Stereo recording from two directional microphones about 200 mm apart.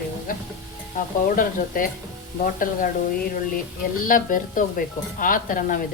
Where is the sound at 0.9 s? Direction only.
45° left (ahead or behind).